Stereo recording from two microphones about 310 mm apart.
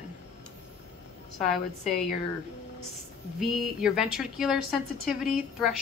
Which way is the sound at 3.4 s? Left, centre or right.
Centre.